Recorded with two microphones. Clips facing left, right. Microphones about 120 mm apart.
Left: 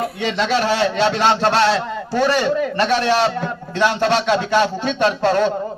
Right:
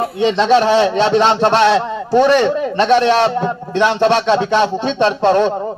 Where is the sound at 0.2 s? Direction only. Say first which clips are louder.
Right 8 dB; 20° right (ahead or behind).